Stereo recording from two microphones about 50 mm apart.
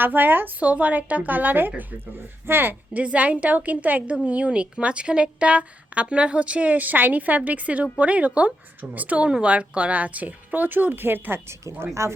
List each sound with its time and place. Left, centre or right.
0.0 s a woman's voice: right
0.6 s a woman's voice: right
2.9 s a woman's voice: right
12.0 s speech: right